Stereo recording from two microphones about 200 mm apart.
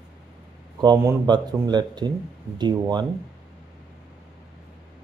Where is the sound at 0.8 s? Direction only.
20° right (ahead or behind).